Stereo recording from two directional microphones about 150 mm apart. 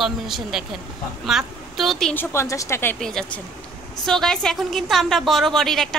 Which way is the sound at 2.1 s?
20° left (ahead or behind).